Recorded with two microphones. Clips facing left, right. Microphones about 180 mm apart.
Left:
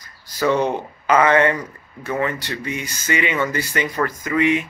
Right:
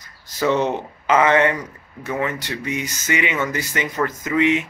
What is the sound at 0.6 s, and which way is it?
Speech, 10° left (ahead or behind).